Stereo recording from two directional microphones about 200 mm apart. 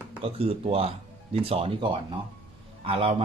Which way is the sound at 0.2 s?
30° right (ahead or behind).